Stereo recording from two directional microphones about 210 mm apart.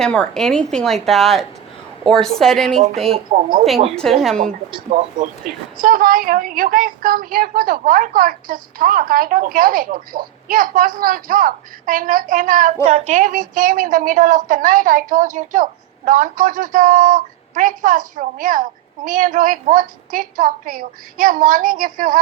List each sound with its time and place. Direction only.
0.0 s speech: 5° left (ahead or behind)
3.3 s speech: 30° right (ahead or behind)
3.9 s speech: centre (ahead or behind)
4.7 s a woman's voice: 30° right (ahead or behind)
5.7 s a woman's voice: 40° right (ahead or behind)